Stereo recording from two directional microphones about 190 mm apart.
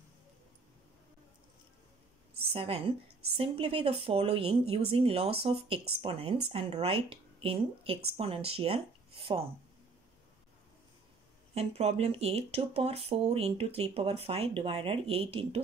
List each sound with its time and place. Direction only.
2.5 s speech: 30° right (ahead or behind)
11.5 s speech: 35° right (ahead or behind)